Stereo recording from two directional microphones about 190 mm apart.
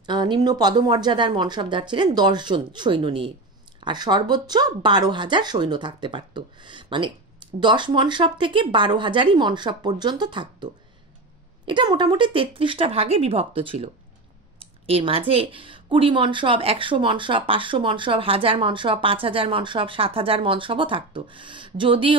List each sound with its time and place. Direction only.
0.0 s speech: 25° right (ahead or behind)